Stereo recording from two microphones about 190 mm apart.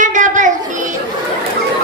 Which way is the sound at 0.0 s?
40° right (ahead or behind).